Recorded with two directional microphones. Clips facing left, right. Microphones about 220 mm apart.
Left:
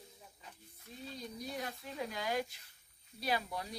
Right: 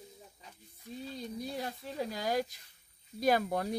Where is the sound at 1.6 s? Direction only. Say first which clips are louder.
Right 2 dB; 35° right (ahead or behind).